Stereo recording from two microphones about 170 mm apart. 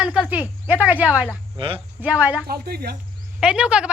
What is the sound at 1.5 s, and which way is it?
Speech, 35° right (ahead or behind).